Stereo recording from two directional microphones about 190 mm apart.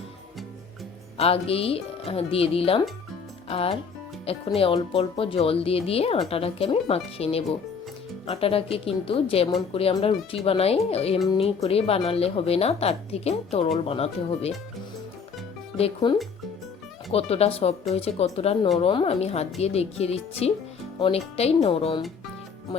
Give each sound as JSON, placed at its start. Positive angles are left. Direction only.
{"t": 1.2, "sound": "speech", "side_deg": 30}
{"t": 15.8, "sound": "speech", "side_deg": 25}